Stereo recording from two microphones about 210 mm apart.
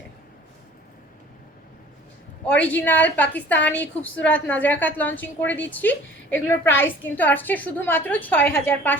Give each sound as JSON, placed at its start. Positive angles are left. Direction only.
{"t": 2.5, "sound": "a woman's voice", "side_deg": 10}